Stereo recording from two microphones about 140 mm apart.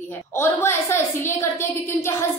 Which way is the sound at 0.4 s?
15° left (ahead or behind).